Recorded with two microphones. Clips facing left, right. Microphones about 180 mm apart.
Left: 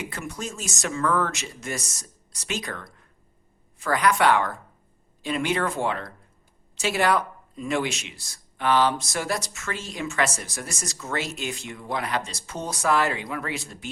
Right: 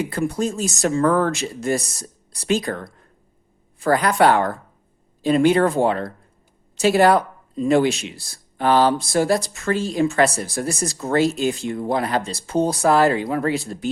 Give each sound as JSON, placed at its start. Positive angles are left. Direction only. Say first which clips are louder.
{"t": 0.1, "sound": "speech", "louder": "right 11 dB", "side_deg": -35}